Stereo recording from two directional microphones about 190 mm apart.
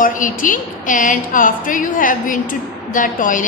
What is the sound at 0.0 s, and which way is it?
A woman's voice, 45° left (ahead or behind).